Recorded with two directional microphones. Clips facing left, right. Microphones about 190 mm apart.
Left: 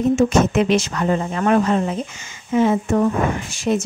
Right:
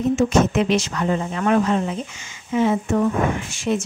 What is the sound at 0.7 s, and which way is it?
Speech, 45° left (ahead or behind).